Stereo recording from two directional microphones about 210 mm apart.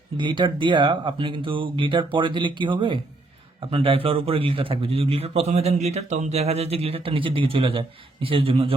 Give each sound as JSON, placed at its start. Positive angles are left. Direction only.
{"t": 0.2, "sound": "a man's voice", "side_deg": -20}